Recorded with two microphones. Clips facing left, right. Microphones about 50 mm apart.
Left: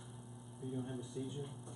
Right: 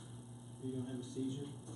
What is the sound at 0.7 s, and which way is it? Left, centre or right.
Speech, centre.